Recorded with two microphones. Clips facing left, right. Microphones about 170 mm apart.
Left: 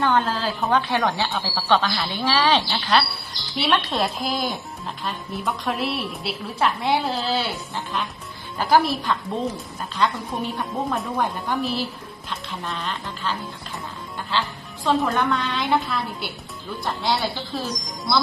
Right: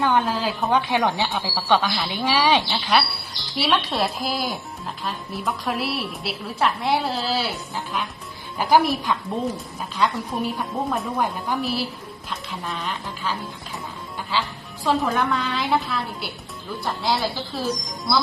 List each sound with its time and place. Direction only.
0.0 s a woman's voice: 10° right (ahead or behind)
8.5 s a woman's voice: 15° right (ahead or behind)
14.3 s a woman's voice: 10° right (ahead or behind)